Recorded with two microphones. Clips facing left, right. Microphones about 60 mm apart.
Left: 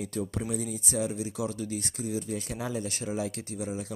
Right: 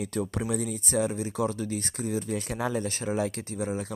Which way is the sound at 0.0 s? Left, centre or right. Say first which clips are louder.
Right 2 dB; right.